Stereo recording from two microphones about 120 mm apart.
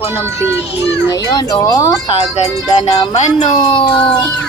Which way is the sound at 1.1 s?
35° left (ahead or behind).